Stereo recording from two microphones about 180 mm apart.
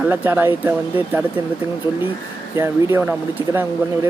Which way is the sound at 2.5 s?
15° right (ahead or behind).